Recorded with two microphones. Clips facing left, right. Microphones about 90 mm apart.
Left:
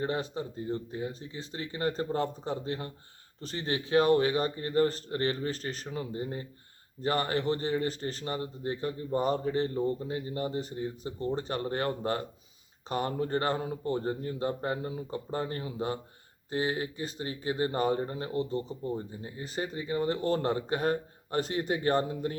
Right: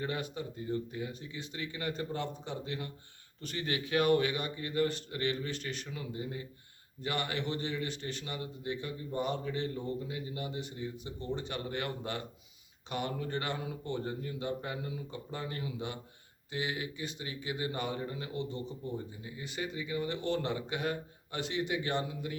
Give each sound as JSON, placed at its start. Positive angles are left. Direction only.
{"t": 0.0, "sound": "speech", "side_deg": 35}